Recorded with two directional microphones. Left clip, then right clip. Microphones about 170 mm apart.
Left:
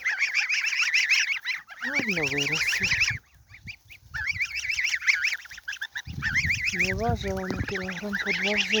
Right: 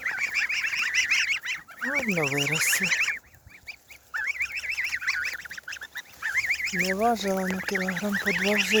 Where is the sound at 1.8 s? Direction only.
35° left (ahead or behind).